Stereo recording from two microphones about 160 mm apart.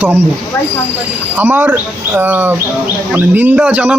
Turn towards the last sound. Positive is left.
turn(degrees=-5)  # may be behind; listen again after turning